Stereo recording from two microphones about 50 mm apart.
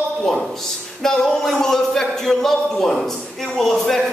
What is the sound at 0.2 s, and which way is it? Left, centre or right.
A man's voice, centre.